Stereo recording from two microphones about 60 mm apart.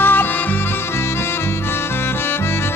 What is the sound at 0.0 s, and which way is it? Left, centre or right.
Music, left.